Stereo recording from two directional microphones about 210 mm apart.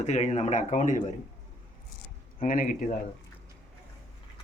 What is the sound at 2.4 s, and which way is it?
Speech, 40° left (ahead or behind).